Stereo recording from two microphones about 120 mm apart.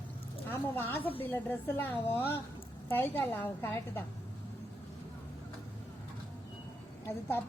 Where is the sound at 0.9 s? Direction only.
15° left (ahead or behind).